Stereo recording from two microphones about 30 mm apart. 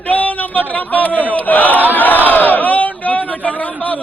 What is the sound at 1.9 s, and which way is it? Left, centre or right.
Speech, left.